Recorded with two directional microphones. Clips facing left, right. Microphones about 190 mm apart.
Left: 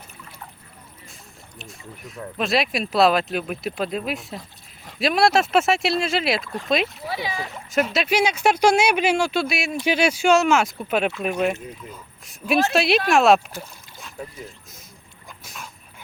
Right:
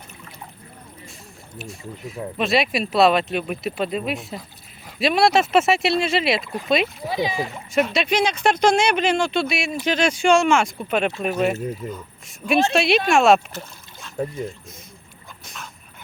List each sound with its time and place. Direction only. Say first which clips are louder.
2.4 s speech: right 2 dB; centre (ahead or behind)
7.0 s speech: right 5 dB; 15° right (ahead or behind)
7.7 s speech: even; 5° left (ahead or behind)
13.5 s boat: right 1 dB; 10° left (ahead or behind)
15.4 s dog: even; 5° left (ahead or behind)